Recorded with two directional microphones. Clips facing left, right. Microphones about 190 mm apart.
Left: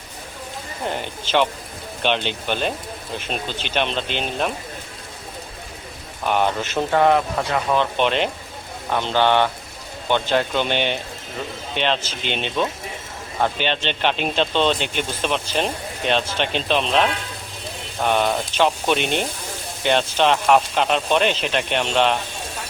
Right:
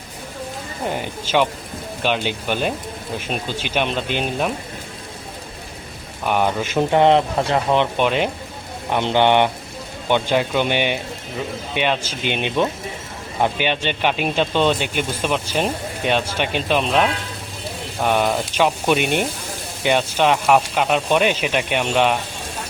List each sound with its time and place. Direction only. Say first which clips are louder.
0.9 s speech: right 1 dB; 10° right (ahead or behind)
6.2 s speech: right 1 dB; 5° right (ahead or behind)
6.9 s speech: right 2 dB; 25° right (ahead or behind)
7.9 s speech: right 1 dB; 5° right (ahead or behind)
8.9 s speech: right 2 dB; 20° right (ahead or behind)